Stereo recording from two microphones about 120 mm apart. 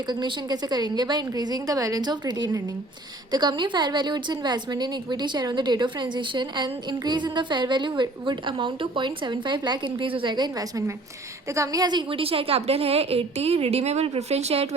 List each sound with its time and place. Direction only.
0.1 s a woman's voice: 40° right (ahead or behind); by 14.8 s 60° right (ahead or behind)